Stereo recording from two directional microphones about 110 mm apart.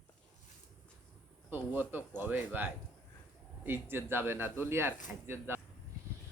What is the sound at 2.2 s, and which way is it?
Speech, 15° right (ahead or behind).